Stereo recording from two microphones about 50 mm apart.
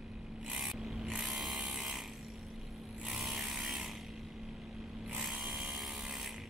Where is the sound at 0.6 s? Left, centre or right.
Centre.